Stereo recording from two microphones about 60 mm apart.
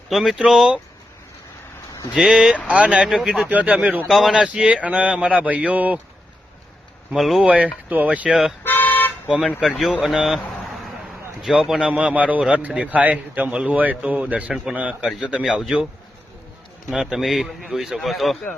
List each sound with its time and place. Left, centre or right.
0.1 s a man's voice: centre
0.3 s a man's voice: centre
2.1 s a man's voice: centre
3.1 s a man's voice: centre
3.5 s speech: right
7.1 s a man's voice: centre
7.4 s speech: right
8.6 s toot: left
9.6 s a man's voice: centre
10.2 s a sound: centre
11.4 s a man's voice: centre
11.8 s speech: centre
14.5 s a man's voice: centre
16.9 s a man's voice: centre